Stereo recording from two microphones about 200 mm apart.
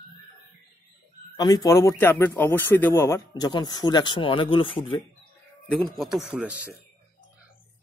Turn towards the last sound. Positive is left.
turn(degrees=-5)  # may be behind; listen again after turning